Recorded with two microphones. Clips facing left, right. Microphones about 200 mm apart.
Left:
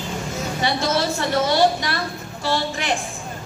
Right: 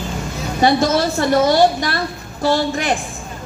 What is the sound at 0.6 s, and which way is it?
A woman's voice, 45° right (ahead or behind).